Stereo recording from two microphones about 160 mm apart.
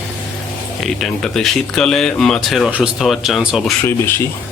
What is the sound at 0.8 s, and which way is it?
Speech, centre (ahead or behind).